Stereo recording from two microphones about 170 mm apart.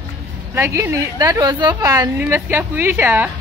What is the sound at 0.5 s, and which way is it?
A woman's voice, 15° right (ahead or behind).